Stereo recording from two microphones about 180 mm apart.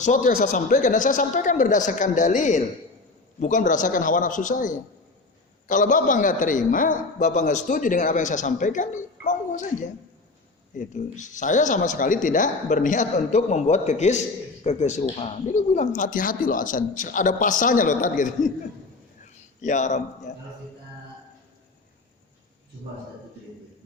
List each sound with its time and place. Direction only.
0.0 s speech: 45° left (ahead or behind)
10.8 s speech: 45° left (ahead or behind)
19.6 s speech: 45° left (ahead or behind)